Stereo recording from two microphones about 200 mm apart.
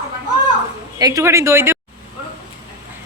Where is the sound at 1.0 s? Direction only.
20° right (ahead or behind).